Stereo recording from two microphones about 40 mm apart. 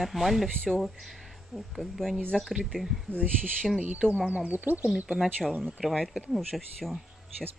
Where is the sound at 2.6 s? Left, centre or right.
Centre.